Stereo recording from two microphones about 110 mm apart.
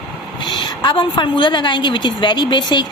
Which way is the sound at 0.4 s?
45° left (ahead or behind).